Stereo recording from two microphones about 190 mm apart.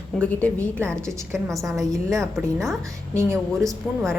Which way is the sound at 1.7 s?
15° right (ahead or behind).